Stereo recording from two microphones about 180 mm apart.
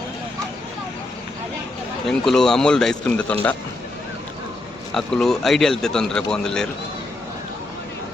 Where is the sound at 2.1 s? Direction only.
5° left (ahead or behind).